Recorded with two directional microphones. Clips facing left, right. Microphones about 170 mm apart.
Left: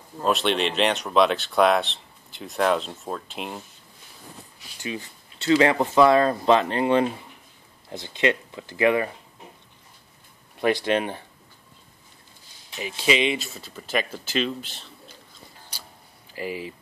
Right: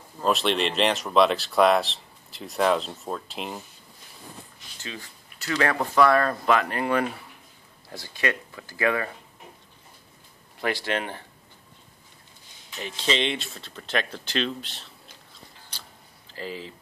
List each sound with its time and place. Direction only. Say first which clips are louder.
0.2 s speech: left 1 dB; centre (ahead or behind)
5.4 s speech: left 6 dB; 20° left (ahead or behind)
10.6 s speech: left 5 dB; 20° left (ahead or behind)
12.7 s speech: left 4 dB; 10° left (ahead or behind)
15.7 s a sound: left 1 dB; 10° left (ahead or behind)
16.3 s speech: left 4 dB; 15° left (ahead or behind)